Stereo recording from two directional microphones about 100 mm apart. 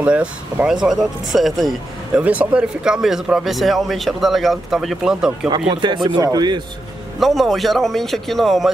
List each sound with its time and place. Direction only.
0.0 s speech: 10° right (ahead or behind)
2.2 s speech: 10° right (ahead or behind)
5.7 s speech: 50° right (ahead or behind)
7.2 s speech: centre (ahead or behind)